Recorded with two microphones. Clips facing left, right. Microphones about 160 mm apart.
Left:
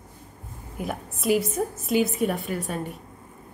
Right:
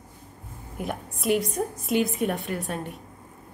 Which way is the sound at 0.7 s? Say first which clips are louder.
Even; centre (ahead or behind).